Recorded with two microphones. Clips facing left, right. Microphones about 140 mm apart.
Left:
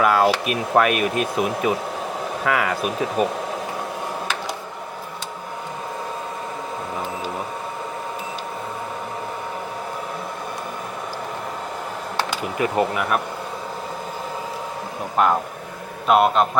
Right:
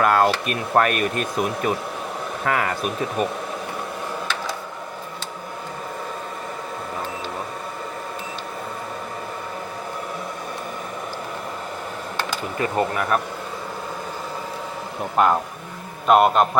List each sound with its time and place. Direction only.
0.0 s speech: 5° left (ahead or behind)
12.5 s speech: 10° left (ahead or behind)
15.1 s speech: centre (ahead or behind)